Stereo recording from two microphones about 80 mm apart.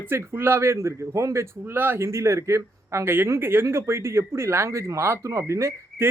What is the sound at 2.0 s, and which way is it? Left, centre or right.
Speech, right.